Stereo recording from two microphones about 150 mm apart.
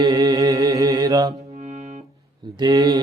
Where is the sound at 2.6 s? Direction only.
30° right (ahead or behind).